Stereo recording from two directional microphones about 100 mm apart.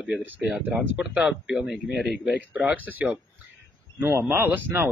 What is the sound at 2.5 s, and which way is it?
Speech, 15° right (ahead or behind).